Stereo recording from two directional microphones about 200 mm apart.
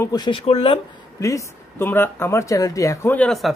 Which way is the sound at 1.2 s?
15° left (ahead or behind).